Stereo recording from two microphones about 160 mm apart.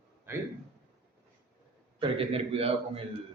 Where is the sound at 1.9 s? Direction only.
35° right (ahead or behind).